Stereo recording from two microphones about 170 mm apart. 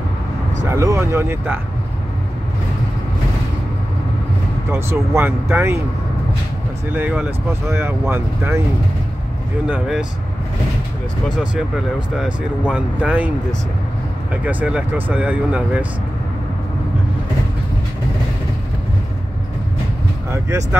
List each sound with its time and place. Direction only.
0.7 s speech: 15° right (ahead or behind)
4.6 s speech: 15° right (ahead or behind)
7.0 s speech: 10° right (ahead or behind)
9.7 s speech: 5° right (ahead or behind)
12.2 s speech: 5° right (ahead or behind)
14.3 s speech: 10° right (ahead or behind)
20.2 s speech: 15° right (ahead or behind)